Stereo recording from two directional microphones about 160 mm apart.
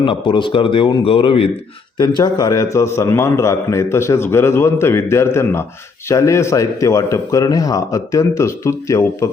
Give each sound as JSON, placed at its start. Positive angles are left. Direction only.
{"t": 0.0, "sound": "a man's voice", "side_deg": 30}
{"t": 2.0, "sound": "a man's voice", "side_deg": 25}